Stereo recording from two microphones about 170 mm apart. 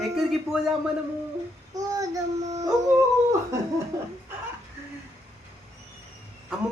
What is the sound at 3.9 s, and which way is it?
Chuckle, 20° right (ahead or behind).